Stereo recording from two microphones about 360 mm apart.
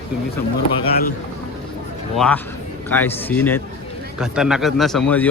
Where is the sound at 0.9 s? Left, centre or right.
Left.